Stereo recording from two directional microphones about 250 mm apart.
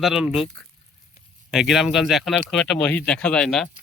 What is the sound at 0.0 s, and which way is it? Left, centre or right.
Speech, centre.